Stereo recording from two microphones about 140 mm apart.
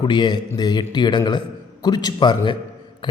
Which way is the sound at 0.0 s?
30° left (ahead or behind).